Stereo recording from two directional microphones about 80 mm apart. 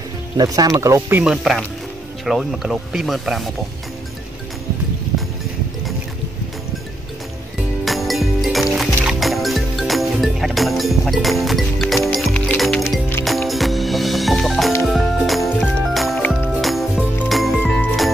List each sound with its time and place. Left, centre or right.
0.4 s speech: right
1.2 s speech: centre
7.8 s music: centre